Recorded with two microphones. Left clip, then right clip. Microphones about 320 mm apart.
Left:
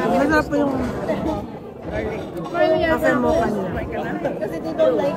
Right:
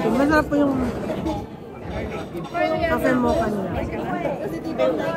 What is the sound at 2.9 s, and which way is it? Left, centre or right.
Speech, centre.